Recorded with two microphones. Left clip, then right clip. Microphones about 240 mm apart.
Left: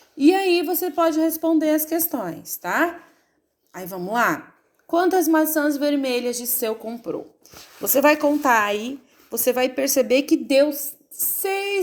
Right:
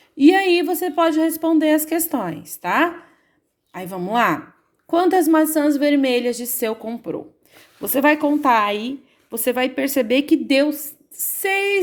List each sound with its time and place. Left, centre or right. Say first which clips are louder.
0.2 s a woman's voice: right 3 dB; right
10.7 s speech: right 2 dB; right
11.3 s speech: right 5 dB; right